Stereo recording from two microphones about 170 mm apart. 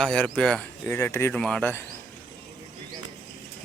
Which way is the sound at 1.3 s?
5° left (ahead or behind).